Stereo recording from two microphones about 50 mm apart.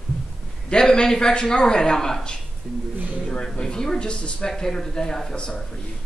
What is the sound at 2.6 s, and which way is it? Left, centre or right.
Speech, centre.